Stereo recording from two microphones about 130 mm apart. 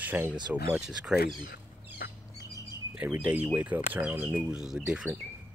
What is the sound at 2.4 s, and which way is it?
Bird, 25° right (ahead or behind).